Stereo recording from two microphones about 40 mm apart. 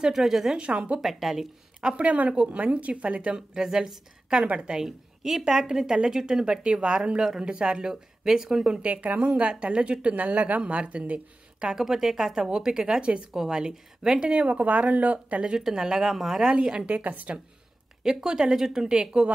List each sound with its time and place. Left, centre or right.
0.1 s speech: centre
0.6 s a woman's voice: right
1.0 s speech: centre
1.8 s speech: right
2.0 s a woman's voice: right
4.8 s speech: centre
6.4 s a woman's voice: right
8.8 s a woman's voice: right
11.7 s a woman's voice: centre; by 15.4 s right
15.7 s speech: centre
16.5 s a woman's voice: right
18.2 s speech: centre